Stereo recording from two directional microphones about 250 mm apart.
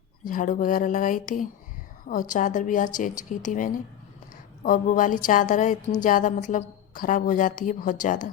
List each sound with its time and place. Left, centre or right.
0.3 s a woman's voice: left